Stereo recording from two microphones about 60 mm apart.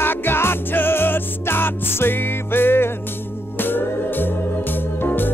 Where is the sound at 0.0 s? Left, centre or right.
Left.